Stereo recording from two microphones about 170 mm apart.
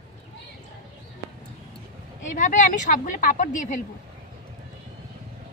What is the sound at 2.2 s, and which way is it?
Speech, 50° left (ahead or behind).